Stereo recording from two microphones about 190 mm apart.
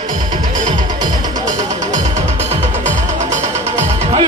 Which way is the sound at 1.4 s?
40° right (ahead or behind).